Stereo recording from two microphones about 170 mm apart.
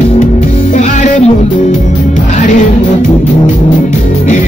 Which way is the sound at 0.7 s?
45° left (ahead or behind).